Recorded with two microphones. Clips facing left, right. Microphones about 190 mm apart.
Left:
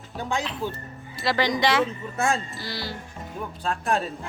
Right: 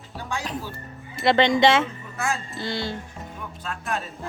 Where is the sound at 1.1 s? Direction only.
20° right (ahead or behind).